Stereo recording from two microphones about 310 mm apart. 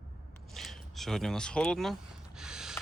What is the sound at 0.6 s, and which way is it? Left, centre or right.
Speech, centre.